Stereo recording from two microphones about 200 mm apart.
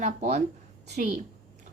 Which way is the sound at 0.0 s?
35° right (ahead or behind).